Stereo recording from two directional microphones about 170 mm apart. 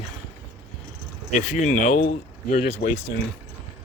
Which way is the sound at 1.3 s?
45° left (ahead or behind).